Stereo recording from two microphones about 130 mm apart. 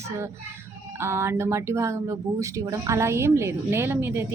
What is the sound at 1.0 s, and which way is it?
Speech, 20° right (ahead or behind).